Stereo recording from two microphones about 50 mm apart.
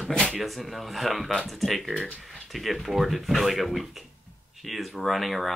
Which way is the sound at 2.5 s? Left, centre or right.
Centre.